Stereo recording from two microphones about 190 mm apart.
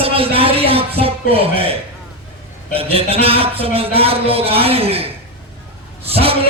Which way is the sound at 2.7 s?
30° right (ahead or behind).